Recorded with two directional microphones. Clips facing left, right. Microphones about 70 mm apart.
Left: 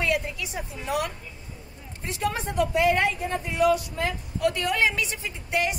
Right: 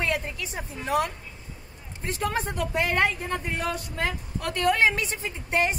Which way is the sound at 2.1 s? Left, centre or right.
Right.